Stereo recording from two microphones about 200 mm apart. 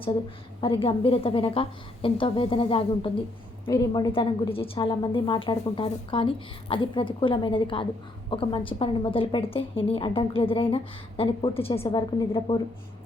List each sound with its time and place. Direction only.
0.6 s a woman's voice: 25° left (ahead or behind)